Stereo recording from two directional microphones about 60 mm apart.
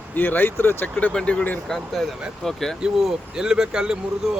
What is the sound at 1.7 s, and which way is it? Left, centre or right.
Speech, centre.